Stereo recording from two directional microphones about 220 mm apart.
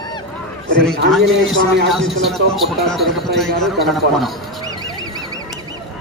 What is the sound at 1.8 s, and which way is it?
A man's voice, centre (ahead or behind).